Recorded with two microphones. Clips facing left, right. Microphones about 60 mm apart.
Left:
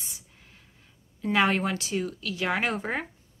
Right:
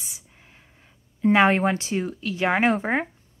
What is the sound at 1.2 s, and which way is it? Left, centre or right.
Speech, right.